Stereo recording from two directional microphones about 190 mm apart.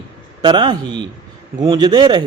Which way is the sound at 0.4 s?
25° right (ahead or behind).